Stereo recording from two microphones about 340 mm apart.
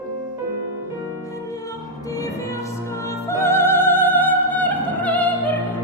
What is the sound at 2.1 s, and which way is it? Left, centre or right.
Music, centre.